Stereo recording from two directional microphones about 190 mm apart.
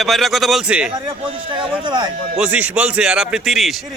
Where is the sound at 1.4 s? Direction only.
25° right (ahead or behind).